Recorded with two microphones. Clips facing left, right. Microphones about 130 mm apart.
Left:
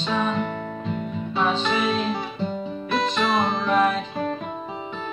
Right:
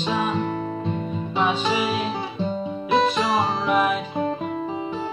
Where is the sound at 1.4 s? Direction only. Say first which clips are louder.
Right 1 dB; 10° right (ahead or behind).